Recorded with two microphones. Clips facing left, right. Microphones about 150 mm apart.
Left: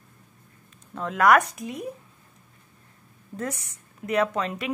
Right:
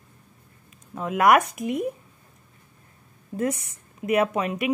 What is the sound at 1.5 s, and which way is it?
Speech, 55° right (ahead or behind).